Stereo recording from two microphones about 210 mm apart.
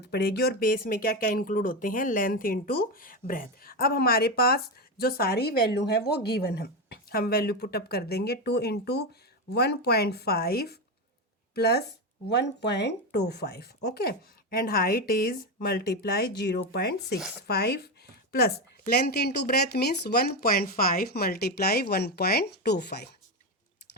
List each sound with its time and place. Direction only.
0.0 s speech: 50° left (ahead or behind)
17.2 s speech: 5° right (ahead or behind)
17.4 s speech: 50° left (ahead or behind)